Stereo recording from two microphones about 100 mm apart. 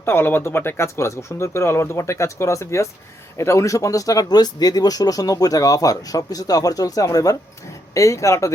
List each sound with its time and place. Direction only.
0.0 s speech: 25° left (ahead or behind)